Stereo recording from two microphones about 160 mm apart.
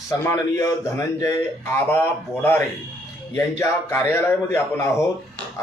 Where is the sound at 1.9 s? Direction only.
15° left (ahead or behind).